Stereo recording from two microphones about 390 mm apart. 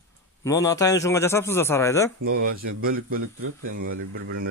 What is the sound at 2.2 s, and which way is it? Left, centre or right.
Speech, right.